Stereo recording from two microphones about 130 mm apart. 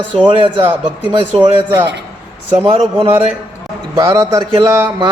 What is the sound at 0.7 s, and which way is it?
Speech, 10° right (ahead or behind).